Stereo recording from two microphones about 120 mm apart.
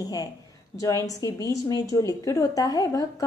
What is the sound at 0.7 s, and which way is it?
A woman's voice, 30° left (ahead or behind).